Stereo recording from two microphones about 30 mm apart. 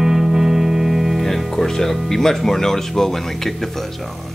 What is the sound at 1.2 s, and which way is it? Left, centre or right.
Music, centre.